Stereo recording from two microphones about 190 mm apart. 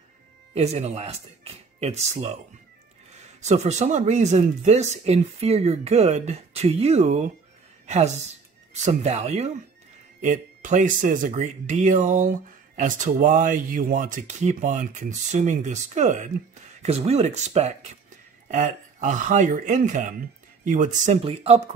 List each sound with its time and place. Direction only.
0.6 s speech: 35° right (ahead or behind)
3.3 s speech: 35° right (ahead or behind)
7.8 s a sound: 35° right (ahead or behind)
8.7 s speech: 35° right (ahead or behind)